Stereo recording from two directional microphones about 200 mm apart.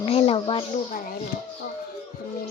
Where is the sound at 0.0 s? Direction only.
30° left (ahead or behind).